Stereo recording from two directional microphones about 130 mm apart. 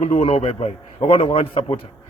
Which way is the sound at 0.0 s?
50° left (ahead or behind).